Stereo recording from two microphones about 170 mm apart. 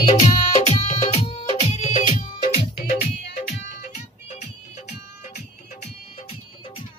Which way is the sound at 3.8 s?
45° left (ahead or behind).